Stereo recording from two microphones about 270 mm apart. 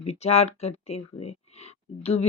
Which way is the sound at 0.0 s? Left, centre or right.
Left.